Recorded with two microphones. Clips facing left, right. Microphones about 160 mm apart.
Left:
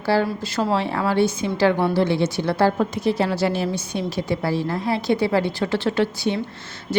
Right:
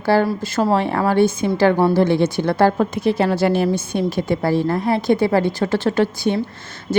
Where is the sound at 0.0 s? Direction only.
50° right (ahead or behind).